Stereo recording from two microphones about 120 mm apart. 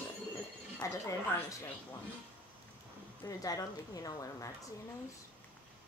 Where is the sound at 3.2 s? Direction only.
30° left (ahead or behind).